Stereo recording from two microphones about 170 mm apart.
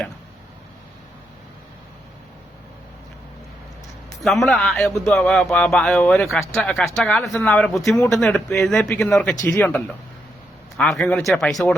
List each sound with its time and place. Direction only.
4.2 s speech: centre (ahead or behind)